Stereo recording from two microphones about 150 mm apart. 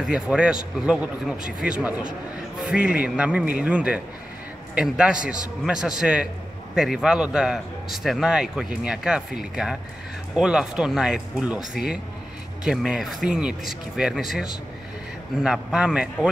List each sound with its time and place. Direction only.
0.0 s a man's voice: 5° right (ahead or behind)